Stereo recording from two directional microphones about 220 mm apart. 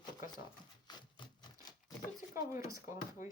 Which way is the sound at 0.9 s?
20° left (ahead or behind).